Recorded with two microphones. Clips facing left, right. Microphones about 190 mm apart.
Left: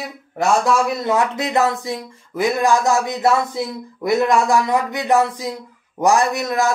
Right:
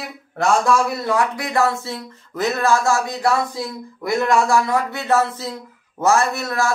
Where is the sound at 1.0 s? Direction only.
20° left (ahead or behind).